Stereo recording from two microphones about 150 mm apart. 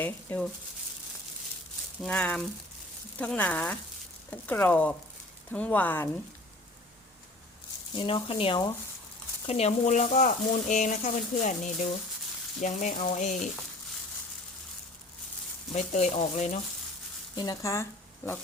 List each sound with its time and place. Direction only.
0.0 s speech: 10° left (ahead or behind)
2.0 s speech: 10° left (ahead or behind)
7.9 s speech: 35° left (ahead or behind)
9.5 s speech: 45° left (ahead or behind)
12.6 s frying: 55° left (ahead or behind)
15.7 s speech: 50° left (ahead or behind)
17.3 s speech: 25° left (ahead or behind)